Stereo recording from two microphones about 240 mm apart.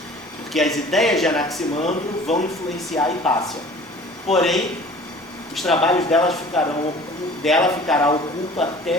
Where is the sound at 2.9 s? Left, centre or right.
Centre.